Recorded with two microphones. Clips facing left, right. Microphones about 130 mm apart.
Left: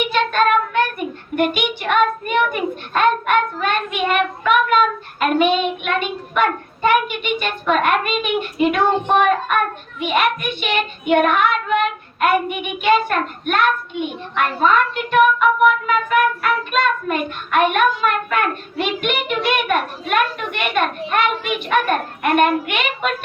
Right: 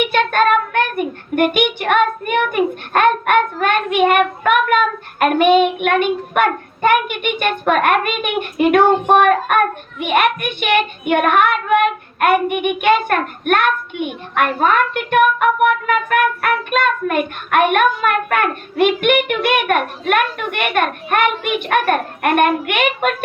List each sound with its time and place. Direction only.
0.1 s child singing: 55° right (ahead or behind)